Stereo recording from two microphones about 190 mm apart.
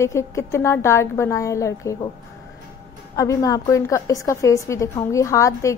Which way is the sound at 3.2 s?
15° left (ahead or behind).